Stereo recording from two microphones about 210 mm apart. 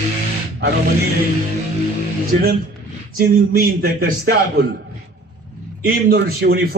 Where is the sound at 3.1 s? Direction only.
45° right (ahead or behind).